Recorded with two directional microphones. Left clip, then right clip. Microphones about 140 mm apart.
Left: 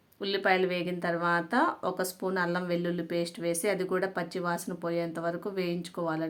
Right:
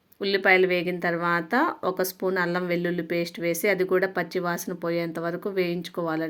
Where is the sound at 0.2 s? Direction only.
20° right (ahead or behind).